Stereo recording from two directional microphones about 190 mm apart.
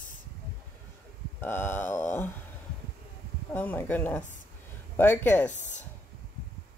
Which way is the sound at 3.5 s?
10° left (ahead or behind).